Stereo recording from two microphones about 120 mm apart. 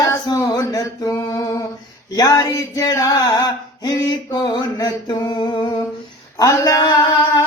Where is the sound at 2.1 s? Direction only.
30° left (ahead or behind).